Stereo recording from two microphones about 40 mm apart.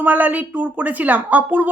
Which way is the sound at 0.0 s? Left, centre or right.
Right.